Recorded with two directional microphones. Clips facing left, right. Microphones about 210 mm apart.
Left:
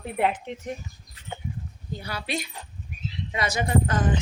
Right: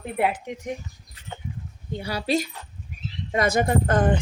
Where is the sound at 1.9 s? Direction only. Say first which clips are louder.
Right 7 dB; 30° right (ahead or behind).